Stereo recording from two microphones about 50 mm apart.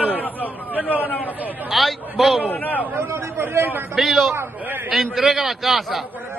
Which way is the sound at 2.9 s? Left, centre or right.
Right.